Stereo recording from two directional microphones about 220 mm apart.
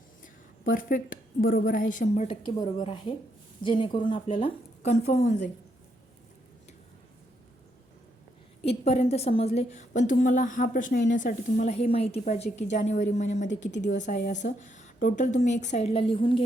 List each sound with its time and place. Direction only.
0.2 s a woman's voice: 40° left (ahead or behind)
8.8 s a woman's voice: 30° left (ahead or behind)